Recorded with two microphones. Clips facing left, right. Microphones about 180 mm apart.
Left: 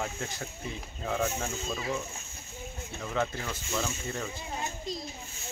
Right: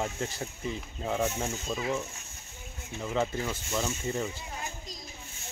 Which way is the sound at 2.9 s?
10° right (ahead or behind).